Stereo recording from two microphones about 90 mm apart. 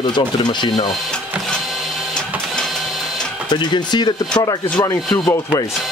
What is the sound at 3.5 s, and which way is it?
Speech, 55° left (ahead or behind).